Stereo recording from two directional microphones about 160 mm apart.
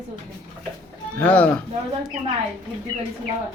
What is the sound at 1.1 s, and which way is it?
Speech, 10° left (ahead or behind).